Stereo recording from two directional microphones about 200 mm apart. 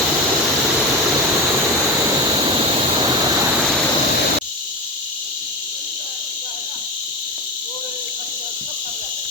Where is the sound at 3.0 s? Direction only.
20° right (ahead or behind).